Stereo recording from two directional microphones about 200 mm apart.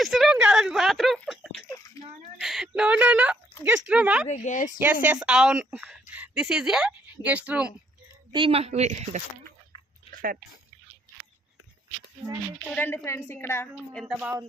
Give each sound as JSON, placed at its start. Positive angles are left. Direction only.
{"t": 0.0, "sound": "a sound", "side_deg": 0}
{"t": 3.6, "sound": "speech", "side_deg": -5}
{"t": 4.3, "sound": "speech", "side_deg": 35}
{"t": 4.8, "sound": "a woman's voice", "side_deg": -10}
{"t": 8.3, "sound": "speech", "side_deg": -25}
{"t": 10.1, "sound": "a sound", "side_deg": -45}
{"t": 12.6, "sound": "a woman's voice", "side_deg": 5}
{"t": 14.1, "sound": "speech", "side_deg": -5}